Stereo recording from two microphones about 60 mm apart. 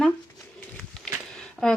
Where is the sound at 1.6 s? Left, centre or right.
Centre.